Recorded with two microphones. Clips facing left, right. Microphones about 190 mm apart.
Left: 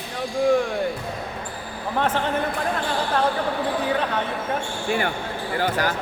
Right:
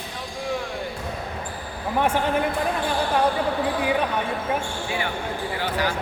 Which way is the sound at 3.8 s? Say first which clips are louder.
Even; 10° right (ahead or behind).